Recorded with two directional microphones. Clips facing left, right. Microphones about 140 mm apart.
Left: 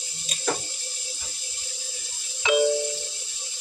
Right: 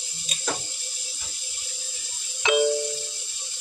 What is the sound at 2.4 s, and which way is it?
Music, 65° right (ahead or behind).